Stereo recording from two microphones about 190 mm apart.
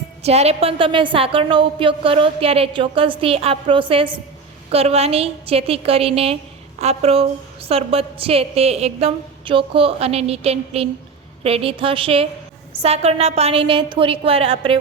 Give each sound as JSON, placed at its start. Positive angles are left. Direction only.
{"t": 0.2, "sound": "a woman's voice", "side_deg": -35}